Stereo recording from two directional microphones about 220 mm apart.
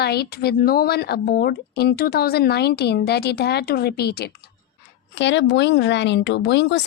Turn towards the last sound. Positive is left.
turn(degrees=50)  # may be behind; listen again after turning